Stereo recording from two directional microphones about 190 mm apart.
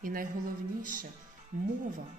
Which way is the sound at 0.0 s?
50° right (ahead or behind).